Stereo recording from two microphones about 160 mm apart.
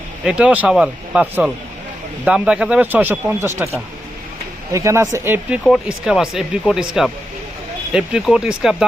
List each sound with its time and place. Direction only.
0.3 s speech: 5° right (ahead or behind)
4.7 s speech: 20° right (ahead or behind)
5.6 s speech: centre (ahead or behind)